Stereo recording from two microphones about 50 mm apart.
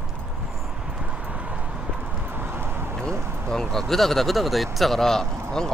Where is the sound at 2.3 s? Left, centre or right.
Right.